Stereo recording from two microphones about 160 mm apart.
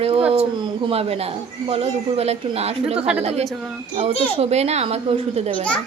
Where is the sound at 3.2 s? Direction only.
40° right (ahead or behind).